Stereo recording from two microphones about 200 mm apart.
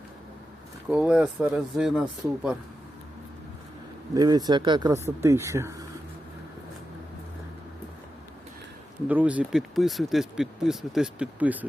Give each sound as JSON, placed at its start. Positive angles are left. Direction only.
{"t": 0.9, "sound": "speech", "side_deg": -5}
{"t": 4.1, "sound": "speech", "side_deg": -20}
{"t": 9.0, "sound": "speech", "side_deg": -5}